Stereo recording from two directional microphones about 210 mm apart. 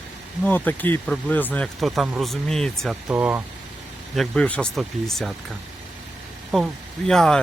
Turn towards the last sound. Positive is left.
turn(degrees=5)  # may be behind; listen again after turning